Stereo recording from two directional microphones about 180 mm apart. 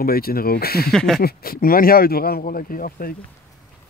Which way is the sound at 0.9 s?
Centre (ahead or behind).